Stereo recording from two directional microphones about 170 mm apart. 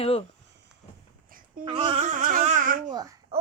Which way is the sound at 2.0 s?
50° right (ahead or behind).